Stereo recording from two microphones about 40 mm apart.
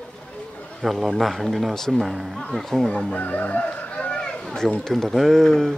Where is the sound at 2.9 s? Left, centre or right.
Left.